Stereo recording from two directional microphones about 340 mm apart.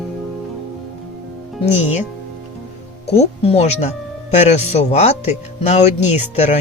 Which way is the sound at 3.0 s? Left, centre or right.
Centre.